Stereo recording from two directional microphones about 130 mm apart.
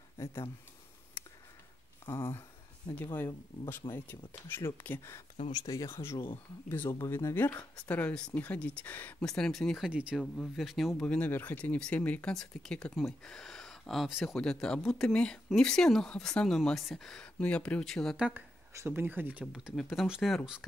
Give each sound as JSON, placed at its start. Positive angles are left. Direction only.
{"t": 0.2, "sound": "speech", "side_deg": 20}
{"t": 2.0, "sound": "speech", "side_deg": 20}
{"t": 6.1, "sound": "speech", "side_deg": 40}
{"t": 6.7, "sound": "speech", "side_deg": 20}
{"t": 9.8, "sound": "speech", "side_deg": -10}
{"t": 10.2, "sound": "speech", "side_deg": 5}
{"t": 11.1, "sound": "speech", "side_deg": 10}
{"t": 18.1, "sound": "speech", "side_deg": -10}
{"t": 18.7, "sound": "speech", "side_deg": -20}
{"t": 19.5, "sound": "speech", "side_deg": 0}